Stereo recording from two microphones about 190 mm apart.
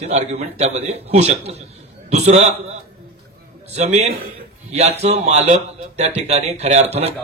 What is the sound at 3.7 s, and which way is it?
A man's voice, 35° right (ahead or behind).